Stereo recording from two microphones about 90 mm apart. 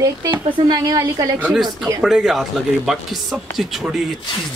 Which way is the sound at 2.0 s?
5° right (ahead or behind).